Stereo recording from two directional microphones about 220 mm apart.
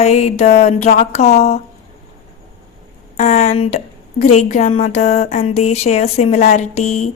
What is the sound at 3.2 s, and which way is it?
A woman's voice, 30° left (ahead or behind).